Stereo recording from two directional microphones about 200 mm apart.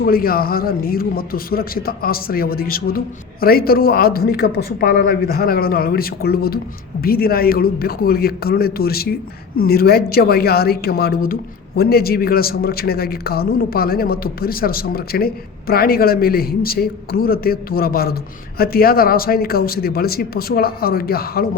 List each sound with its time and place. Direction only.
0.0 s a man's voice: 50° left (ahead or behind)